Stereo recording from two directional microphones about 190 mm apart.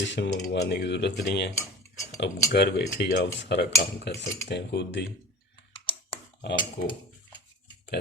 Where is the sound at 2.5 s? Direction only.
60° left (ahead or behind).